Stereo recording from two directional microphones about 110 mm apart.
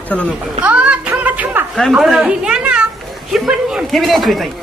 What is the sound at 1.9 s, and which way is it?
A woman's voice, 5° right (ahead or behind).